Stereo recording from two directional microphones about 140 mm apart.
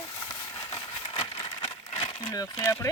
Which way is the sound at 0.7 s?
40° left (ahead or behind).